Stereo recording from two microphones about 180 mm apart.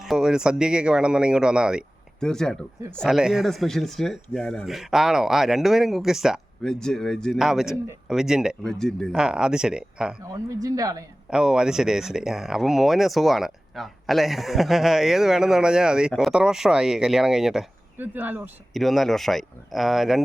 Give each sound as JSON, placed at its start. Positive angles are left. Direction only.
{"t": 0.0, "sound": "speech", "side_deg": -5}
{"t": 10.3, "sound": "speech", "side_deg": -20}
{"t": 11.3, "sound": "speech", "side_deg": -5}
{"t": 18.7, "sound": "speech", "side_deg": 0}